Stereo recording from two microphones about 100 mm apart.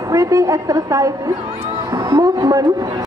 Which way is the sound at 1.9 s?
40° right (ahead or behind).